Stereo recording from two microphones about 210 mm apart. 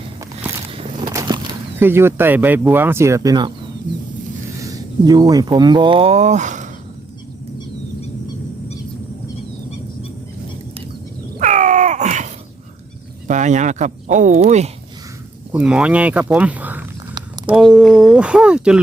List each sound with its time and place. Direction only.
0.7 s a sound: 25° right (ahead or behind)
1.8 s speech: 10° right (ahead or behind)
4.6 s speech: 15° right (ahead or behind); by 6.7 s 35° right (ahead or behind)
11.3 s groan: 35° right (ahead or behind)
13.2 s speech: 35° right (ahead or behind)
15.5 s speech: 5° right (ahead or behind)